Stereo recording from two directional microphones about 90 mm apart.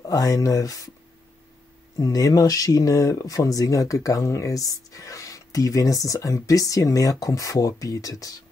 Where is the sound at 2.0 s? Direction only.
40° left (ahead or behind).